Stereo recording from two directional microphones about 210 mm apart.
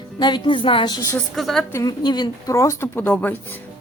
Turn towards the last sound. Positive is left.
turn(degrees=10)  # may be behind; listen again after turning